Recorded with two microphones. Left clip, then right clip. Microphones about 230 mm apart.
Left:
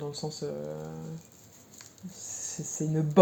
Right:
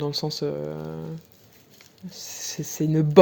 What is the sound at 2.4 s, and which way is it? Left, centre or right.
Speech, right.